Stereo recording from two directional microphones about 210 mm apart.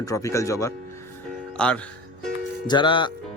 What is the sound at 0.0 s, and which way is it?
Speech, 15° left (ahead or behind).